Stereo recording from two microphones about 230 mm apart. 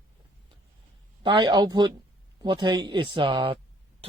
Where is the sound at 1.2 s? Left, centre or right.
Right.